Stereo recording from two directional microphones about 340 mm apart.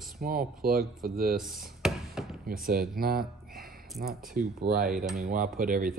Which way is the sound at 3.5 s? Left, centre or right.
Right.